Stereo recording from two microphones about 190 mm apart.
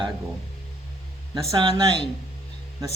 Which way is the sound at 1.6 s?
25° right (ahead or behind).